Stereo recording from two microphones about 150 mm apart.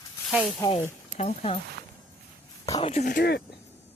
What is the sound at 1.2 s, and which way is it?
Speech, 40° left (ahead or behind).